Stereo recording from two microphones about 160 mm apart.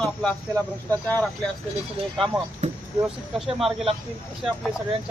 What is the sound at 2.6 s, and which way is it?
Vehicle, 50° right (ahead or behind).